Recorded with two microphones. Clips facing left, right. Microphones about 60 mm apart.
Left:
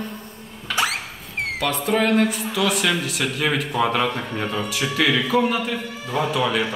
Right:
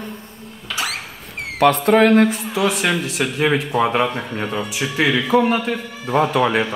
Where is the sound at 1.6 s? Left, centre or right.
Right; by 4.2 s centre.